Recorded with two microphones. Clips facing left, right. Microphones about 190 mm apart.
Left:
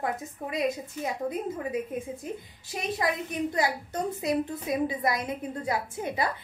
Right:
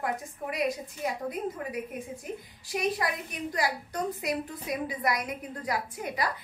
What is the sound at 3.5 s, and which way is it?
A woman's voice, 25° left (ahead or behind).